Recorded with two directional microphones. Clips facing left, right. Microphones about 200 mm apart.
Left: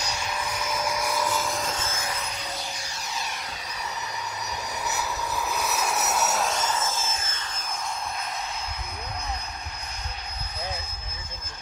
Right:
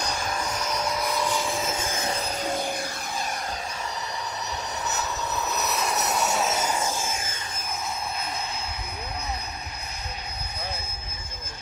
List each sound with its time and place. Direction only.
0.0 s vehicle: 55° right (ahead or behind)
0.5 s vehicle: 5° left (ahead or behind)
1.9 s music: 20° right (ahead or behind)
2.1 s vehicle: 35° right (ahead or behind)
2.4 s music: 50° right (ahead or behind)
4.8 s vehicle: 10° left (ahead or behind); by 7.4 s 10° right (ahead or behind)